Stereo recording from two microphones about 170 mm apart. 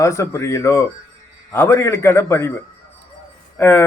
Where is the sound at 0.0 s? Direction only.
15° left (ahead or behind).